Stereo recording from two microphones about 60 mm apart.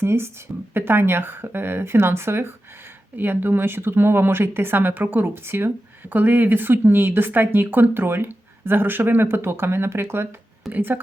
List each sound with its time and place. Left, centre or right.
0.0 s speech: right